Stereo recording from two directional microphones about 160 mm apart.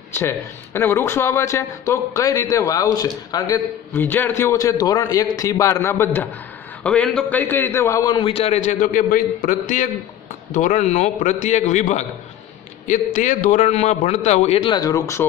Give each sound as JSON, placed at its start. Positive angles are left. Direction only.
{"t": 0.2, "sound": "speech", "side_deg": 15}
{"t": 3.9, "sound": "a man's voice", "side_deg": 10}
{"t": 8.3, "sound": "a man's voice", "side_deg": 40}